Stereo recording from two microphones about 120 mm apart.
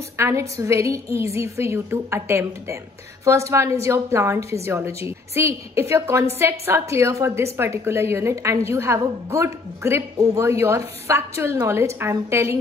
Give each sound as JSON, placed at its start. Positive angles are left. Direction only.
{"t": 0.2, "sound": "a woman's voice", "side_deg": -25}